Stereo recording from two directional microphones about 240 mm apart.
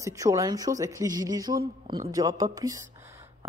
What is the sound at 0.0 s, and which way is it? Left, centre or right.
A woman's voice, centre.